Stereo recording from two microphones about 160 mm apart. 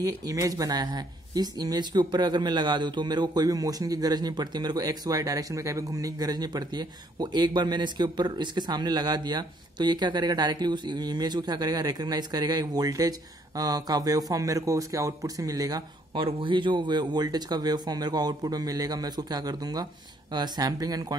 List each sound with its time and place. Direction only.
0.0 s speech: 20° right (ahead or behind)